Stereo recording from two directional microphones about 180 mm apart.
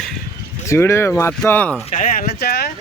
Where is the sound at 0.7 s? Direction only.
15° left (ahead or behind).